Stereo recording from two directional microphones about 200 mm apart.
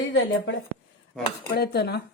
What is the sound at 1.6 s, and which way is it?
Dishes, 55° left (ahead or behind).